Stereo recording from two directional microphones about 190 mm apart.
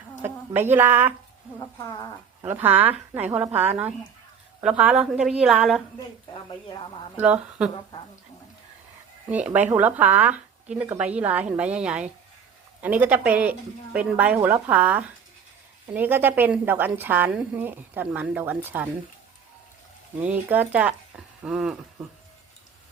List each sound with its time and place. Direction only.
0.2 s speech: 10° right (ahead or behind)
1.5 s speech: 15° left (ahead or behind)
2.4 s a woman's voice: 10° right (ahead or behind)
7.2 s a woman's voice: 5° right (ahead or behind)
9.3 s a woman's voice: 10° right (ahead or behind)
20.2 s a woman's voice: 10° right (ahead or behind)